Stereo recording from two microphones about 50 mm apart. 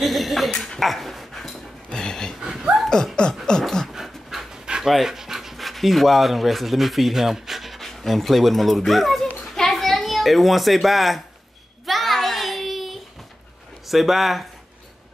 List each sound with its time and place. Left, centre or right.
0.0 s speech: centre
0.5 s speech: centre
0.7 s dog: centre
1.9 s a sound: centre
2.4 s a sound: centre
3.2 s a sound: centre
3.9 s dog: centre
4.9 s speech: centre
9.4 s children playing: centre
11.8 s child singing: centre
13.8 s speech: centre